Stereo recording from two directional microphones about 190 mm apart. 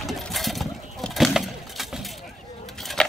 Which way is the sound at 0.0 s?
Centre (ahead or behind).